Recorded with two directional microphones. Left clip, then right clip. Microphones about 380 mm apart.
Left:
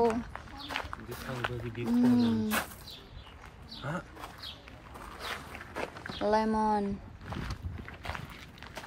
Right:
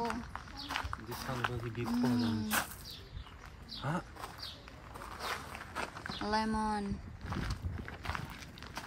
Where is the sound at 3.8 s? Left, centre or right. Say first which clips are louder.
Left 1 dB; right.